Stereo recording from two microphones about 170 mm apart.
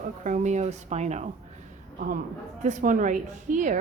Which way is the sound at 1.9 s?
55° right (ahead or behind).